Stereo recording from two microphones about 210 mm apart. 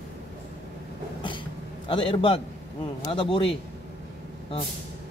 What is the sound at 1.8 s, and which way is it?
A man's voice, 25° left (ahead or behind).